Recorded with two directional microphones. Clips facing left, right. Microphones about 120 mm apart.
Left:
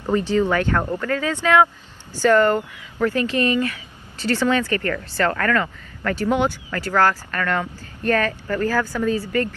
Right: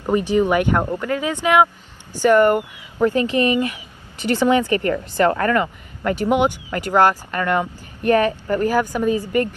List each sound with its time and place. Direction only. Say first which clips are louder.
0.0 s speech: right 2 dB; 15° right (ahead or behind)